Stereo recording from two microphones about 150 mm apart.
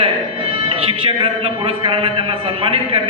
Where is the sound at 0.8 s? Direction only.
40° right (ahead or behind).